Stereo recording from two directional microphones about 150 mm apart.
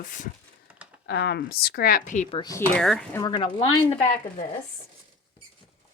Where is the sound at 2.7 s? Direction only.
5° left (ahead or behind).